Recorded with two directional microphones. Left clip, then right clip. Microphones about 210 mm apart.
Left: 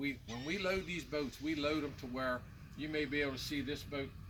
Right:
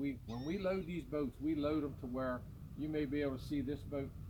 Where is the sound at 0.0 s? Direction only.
15° left (ahead or behind).